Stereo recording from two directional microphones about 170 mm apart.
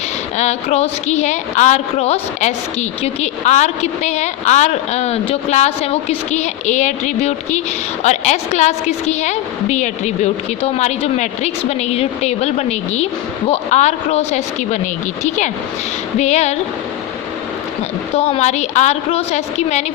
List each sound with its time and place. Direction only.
0.3 s a woman's voice: 40° left (ahead or behind)
16.1 s a woman's voice: 40° left (ahead or behind)
18.1 s a woman's voice: 40° left (ahead or behind)